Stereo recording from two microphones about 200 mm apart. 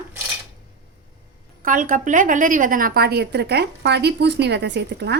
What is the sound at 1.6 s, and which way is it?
A woman's voice, 40° right (ahead or behind).